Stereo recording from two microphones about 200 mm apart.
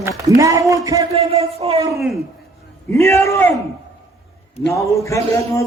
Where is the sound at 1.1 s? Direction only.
30° right (ahead or behind).